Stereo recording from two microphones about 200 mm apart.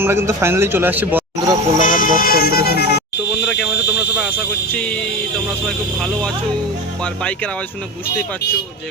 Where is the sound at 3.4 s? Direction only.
5° right (ahead or behind).